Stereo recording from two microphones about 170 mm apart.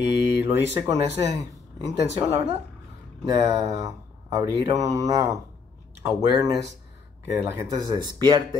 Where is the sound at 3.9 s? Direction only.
20° right (ahead or behind).